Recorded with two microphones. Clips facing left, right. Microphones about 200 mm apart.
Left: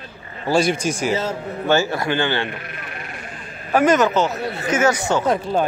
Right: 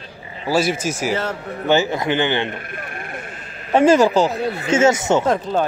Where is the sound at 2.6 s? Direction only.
50° right (ahead or behind).